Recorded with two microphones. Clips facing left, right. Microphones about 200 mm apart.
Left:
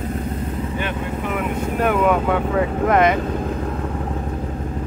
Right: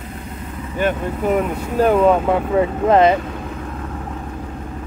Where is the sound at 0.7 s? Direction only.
40° right (ahead or behind).